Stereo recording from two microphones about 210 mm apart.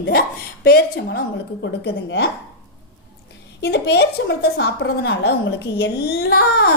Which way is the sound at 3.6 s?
50° left (ahead or behind).